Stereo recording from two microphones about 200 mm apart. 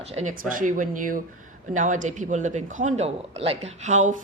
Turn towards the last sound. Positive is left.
turn(degrees=-35)  # may be behind; listen again after turning